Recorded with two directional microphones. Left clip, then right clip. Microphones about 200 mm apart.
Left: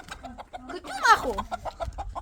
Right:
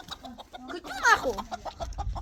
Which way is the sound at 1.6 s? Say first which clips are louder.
Left 3 dB; 20° left (ahead or behind).